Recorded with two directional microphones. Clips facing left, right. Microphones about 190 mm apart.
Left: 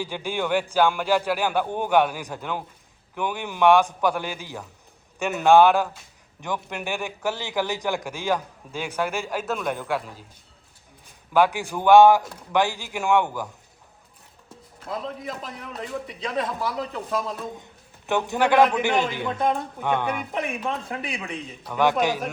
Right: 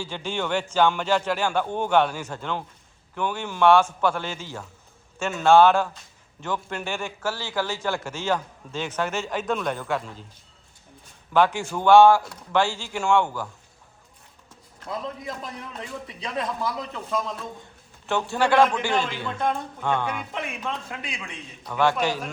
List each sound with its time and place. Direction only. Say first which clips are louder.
0.0 s a man's voice: left 2 dB; 15° left (ahead or behind)
11.3 s a man's voice: even; 15° left (ahead or behind)
14.8 s a man's voice: left 1 dB; centre (ahead or behind)
17.6 s a man's voice: even; 15° left (ahead or behind)
20.9 s a man's voice: left 5 dB; 35° left (ahead or behind)
21.6 s a man's voice: left 1 dB; 15° left (ahead or behind)